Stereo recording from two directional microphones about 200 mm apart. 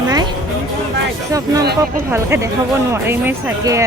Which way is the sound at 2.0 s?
15° right (ahead or behind).